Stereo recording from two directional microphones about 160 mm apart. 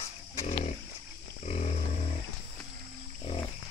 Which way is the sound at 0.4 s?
45° left (ahead or behind).